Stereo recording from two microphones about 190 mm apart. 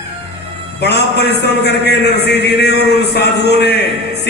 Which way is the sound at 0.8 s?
60° left (ahead or behind).